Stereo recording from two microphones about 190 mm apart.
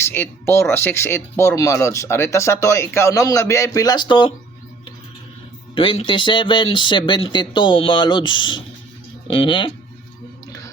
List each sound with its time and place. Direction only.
0.0 s speech: 10° left (ahead or behind)
5.7 s speech: 30° left (ahead or behind)